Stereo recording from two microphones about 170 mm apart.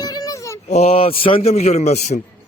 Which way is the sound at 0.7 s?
35° left (ahead or behind).